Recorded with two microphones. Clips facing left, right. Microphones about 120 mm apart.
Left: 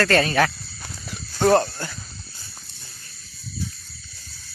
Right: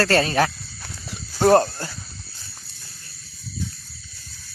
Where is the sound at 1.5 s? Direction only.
35° right (ahead or behind).